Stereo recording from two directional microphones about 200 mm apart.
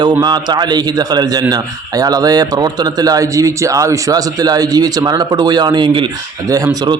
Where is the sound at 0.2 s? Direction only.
20° right (ahead or behind).